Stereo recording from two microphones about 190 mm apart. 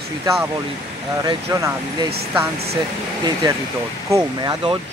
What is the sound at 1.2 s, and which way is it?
Speech, 15° right (ahead or behind).